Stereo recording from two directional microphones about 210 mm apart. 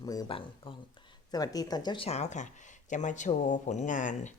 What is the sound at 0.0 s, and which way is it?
Speech, 20° left (ahead or behind).